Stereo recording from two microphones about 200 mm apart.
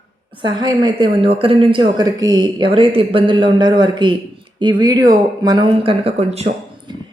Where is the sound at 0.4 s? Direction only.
20° right (ahead or behind).